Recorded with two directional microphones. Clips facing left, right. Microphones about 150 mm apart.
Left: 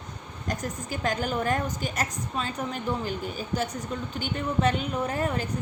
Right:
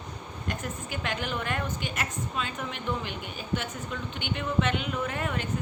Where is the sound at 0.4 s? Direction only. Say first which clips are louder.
Left 3 dB; 40° left (ahead or behind).